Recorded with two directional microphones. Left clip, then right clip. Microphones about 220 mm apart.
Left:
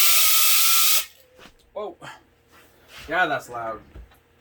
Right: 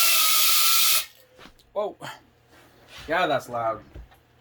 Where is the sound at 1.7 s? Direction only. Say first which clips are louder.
Right 4 dB; 50° right (ahead or behind).